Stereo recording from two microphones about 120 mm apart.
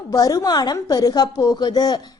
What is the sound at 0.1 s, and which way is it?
A woman's voice, 30° left (ahead or behind).